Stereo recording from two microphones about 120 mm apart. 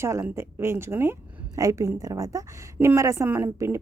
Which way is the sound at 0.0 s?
20° right (ahead or behind).